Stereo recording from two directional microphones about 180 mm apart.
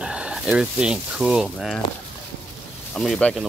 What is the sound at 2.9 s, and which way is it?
Speech, 5° left (ahead or behind).